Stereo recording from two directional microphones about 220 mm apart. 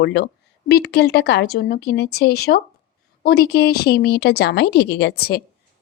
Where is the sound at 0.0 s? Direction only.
50° left (ahead or behind).